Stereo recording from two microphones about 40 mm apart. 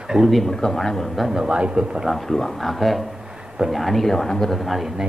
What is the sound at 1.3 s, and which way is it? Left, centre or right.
Speech, centre.